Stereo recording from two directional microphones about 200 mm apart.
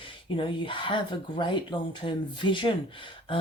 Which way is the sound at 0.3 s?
25° left (ahead or behind).